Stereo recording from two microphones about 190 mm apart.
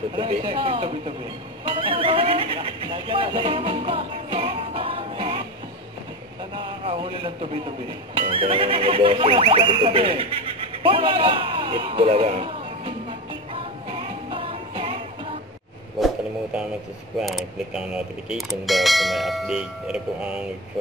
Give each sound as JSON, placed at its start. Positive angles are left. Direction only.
{"t": 0.1, "sound": "speech", "side_deg": -25}
{"t": 6.5, "sound": "speech", "side_deg": -25}
{"t": 13.5, "sound": "music", "side_deg": -25}
{"t": 17.2, "sound": "speech", "side_deg": 0}